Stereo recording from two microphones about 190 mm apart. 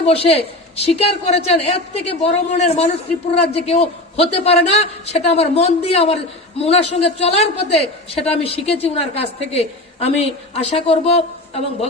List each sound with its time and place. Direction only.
0.0 s a woman's voice: 30° left (ahead or behind)